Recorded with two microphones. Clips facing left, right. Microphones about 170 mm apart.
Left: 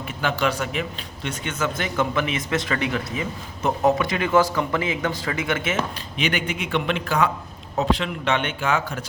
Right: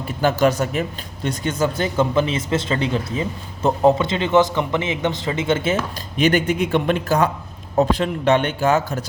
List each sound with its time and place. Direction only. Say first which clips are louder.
0.2 s speech: right 6 dB; 40° right (ahead or behind)
6.1 s a man's voice: right 8 dB; 40° right (ahead or behind)